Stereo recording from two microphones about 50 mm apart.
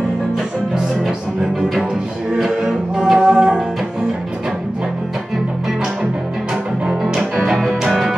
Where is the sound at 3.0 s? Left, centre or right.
Centre.